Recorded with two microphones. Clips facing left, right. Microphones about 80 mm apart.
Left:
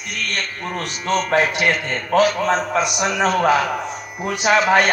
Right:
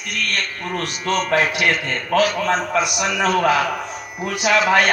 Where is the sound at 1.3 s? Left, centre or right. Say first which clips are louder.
Left 1 dB; centre.